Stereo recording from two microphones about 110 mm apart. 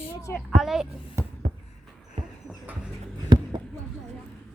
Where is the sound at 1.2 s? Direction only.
25° right (ahead or behind).